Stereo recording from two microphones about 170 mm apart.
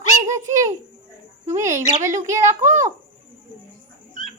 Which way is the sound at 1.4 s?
20° right (ahead or behind).